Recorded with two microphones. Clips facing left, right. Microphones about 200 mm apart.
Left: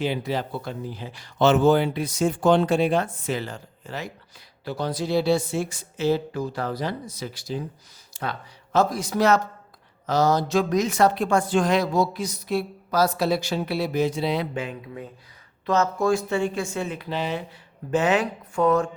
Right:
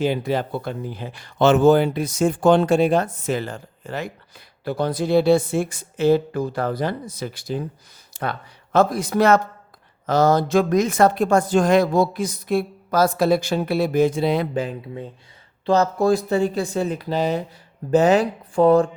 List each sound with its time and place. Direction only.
0.0 s speech: 50° right (ahead or behind); by 18.9 s 30° right (ahead or behind)